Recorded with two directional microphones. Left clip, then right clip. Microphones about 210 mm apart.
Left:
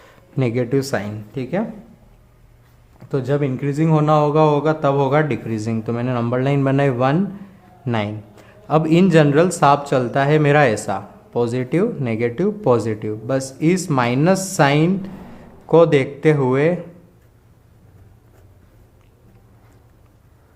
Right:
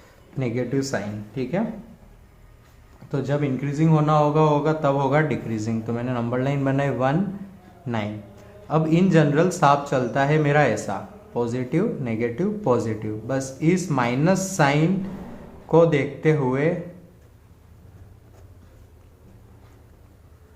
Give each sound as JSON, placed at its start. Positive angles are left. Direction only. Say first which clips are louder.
{"t": 0.0, "sound": "speech", "louder": "left 7 dB", "side_deg": 40}
{"t": 3.1, "sound": "a man's voice", "louder": "left 4 dB", "side_deg": 40}